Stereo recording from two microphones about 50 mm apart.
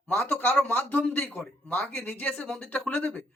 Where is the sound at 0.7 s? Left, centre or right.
Left.